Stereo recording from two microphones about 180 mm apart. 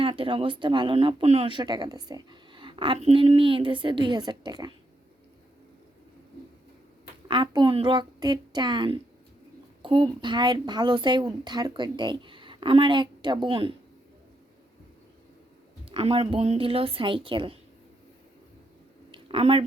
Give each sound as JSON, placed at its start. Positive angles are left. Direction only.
{"t": 0.0, "sound": "speech", "side_deg": -30}
{"t": 7.3, "sound": "speech", "side_deg": -25}
{"t": 15.9, "sound": "a woman's voice", "side_deg": -30}
{"t": 19.1, "sound": "a sound", "side_deg": -30}